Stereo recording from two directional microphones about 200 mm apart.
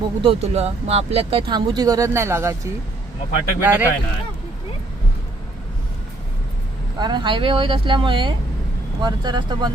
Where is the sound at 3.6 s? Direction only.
10° right (ahead or behind).